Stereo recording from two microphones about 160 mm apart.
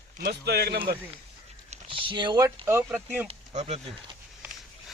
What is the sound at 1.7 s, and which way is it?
Speech, 35° right (ahead or behind).